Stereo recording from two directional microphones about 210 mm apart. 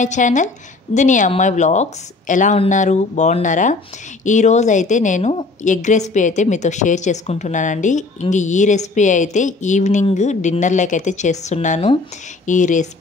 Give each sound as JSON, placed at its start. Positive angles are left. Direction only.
{"t": 0.0, "sound": "a woman's voice", "side_deg": 35}